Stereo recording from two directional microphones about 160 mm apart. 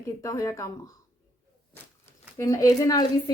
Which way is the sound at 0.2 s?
20° left (ahead or behind).